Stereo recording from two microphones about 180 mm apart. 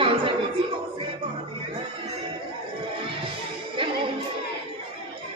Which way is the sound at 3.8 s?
30° right (ahead or behind).